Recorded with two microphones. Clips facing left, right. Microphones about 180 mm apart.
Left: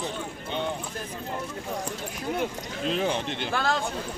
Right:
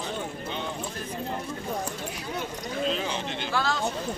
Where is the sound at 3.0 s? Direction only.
55° left (ahead or behind).